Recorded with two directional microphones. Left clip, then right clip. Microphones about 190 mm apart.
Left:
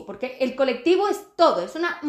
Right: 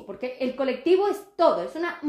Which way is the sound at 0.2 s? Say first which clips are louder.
Left 4 dB; 35° left (ahead or behind).